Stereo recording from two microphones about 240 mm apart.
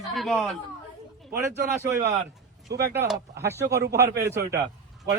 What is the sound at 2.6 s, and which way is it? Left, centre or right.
Speech, right.